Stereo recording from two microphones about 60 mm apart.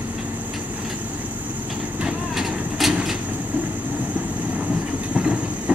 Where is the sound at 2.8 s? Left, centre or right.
Centre.